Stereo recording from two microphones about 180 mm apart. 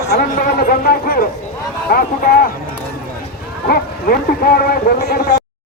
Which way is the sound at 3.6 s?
55° left (ahead or behind).